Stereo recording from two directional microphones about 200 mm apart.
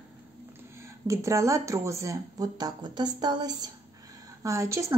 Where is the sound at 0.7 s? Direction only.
15° right (ahead or behind).